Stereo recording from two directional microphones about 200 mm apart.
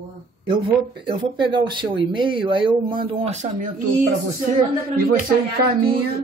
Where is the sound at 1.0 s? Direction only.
25° right (ahead or behind).